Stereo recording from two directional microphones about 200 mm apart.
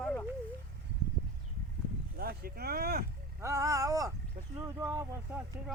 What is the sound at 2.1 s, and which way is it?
Speech, 50° right (ahead or behind).